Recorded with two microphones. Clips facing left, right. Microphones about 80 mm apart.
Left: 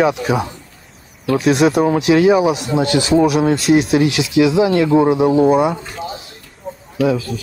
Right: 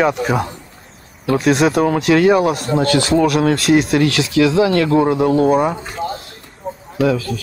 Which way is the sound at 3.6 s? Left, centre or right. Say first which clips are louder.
Even; right.